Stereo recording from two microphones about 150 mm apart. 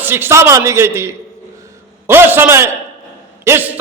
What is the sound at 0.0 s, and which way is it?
A man's voice, 15° right (ahead or behind).